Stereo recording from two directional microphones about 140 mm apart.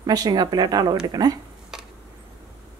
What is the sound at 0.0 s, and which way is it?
Speech, 25° right (ahead or behind).